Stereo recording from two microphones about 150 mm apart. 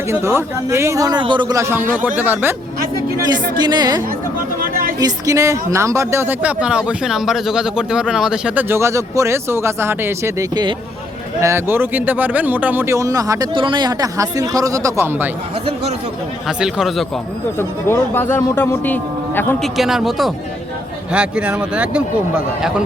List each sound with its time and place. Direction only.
0.1 s speech: 15° right (ahead or behind)
3.6 s a man's voice: 30° right (ahead or behind)
4.6 s a sound: 70° right (ahead or behind)
4.9 s speech: 25° right (ahead or behind)
10.5 s a man's voice: 30° right (ahead or behind)
11.3 s speech: 20° right (ahead or behind)
13.5 s a man's voice: 35° right (ahead or behind); by 15.3 s 15° right (ahead or behind)
15.6 s speech: 45° right (ahead or behind)
16.5 s speech: 5° right (ahead or behind)
17.6 s a man's voice: 15° left (ahead or behind)
19.6 s speech: centre (ahead or behind)